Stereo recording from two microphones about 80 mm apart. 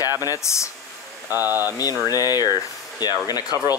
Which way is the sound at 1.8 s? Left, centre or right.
Left.